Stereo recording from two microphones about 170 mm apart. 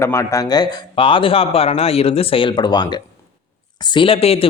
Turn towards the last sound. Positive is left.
turn(degrees=35)  # may be behind; listen again after turning